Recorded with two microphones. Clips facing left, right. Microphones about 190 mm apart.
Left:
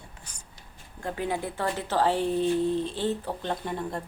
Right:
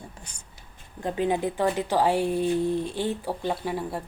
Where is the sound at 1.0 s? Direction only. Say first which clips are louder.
Right 5 dB; 20° right (ahead or behind).